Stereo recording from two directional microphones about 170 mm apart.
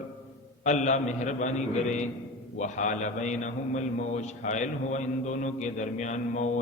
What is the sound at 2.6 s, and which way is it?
A man's voice, 45° left (ahead or behind).